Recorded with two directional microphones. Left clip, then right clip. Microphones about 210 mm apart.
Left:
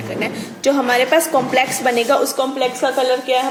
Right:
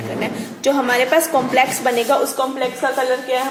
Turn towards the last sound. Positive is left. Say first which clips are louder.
# left 2 dB
turn(degrees=20)  # may be behind; listen again after turning